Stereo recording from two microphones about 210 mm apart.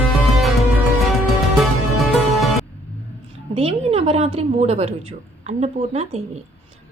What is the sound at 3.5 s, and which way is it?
A woman's voice, 30° right (ahead or behind).